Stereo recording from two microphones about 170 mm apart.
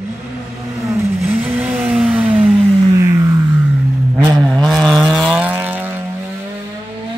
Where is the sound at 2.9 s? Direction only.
20° right (ahead or behind).